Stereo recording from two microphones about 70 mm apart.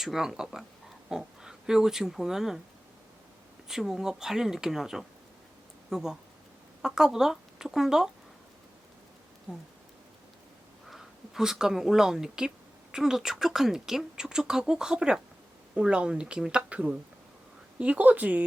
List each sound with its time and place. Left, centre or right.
0.0 s speech: centre
3.7 s speech: centre
9.5 s speech: centre
10.8 s speech: centre; by 18.4 s right